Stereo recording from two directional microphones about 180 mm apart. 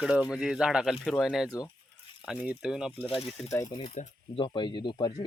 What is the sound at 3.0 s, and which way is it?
Speech, 35° left (ahead or behind).